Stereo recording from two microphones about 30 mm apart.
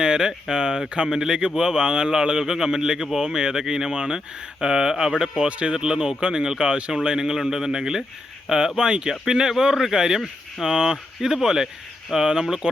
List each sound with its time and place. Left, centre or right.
0.0 s speech: right
5.5 s speech: right
5.7 s speech: right